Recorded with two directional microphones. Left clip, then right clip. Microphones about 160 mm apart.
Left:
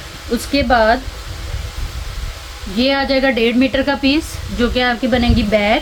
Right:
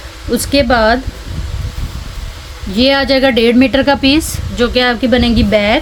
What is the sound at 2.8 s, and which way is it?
A woman's voice, 90° right.